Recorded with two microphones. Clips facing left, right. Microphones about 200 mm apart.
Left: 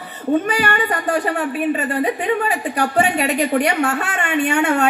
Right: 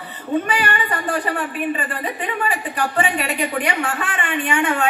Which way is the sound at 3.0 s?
40° left (ahead or behind).